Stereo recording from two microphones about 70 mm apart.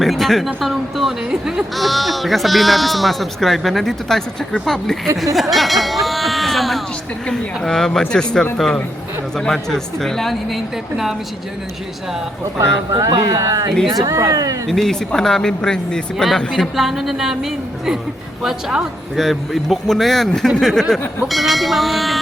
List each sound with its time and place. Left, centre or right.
0.0 s speech: centre
5.1 s a sound: centre
7.3 s speech: centre
12.5 s speech: right
14.7 s speech: centre
19.1 s speech: centre